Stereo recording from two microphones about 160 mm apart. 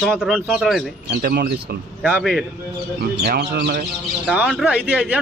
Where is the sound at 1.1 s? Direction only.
75° right (ahead or behind).